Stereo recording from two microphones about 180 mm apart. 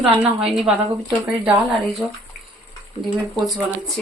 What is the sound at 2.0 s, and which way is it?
Speech, 20° right (ahead or behind).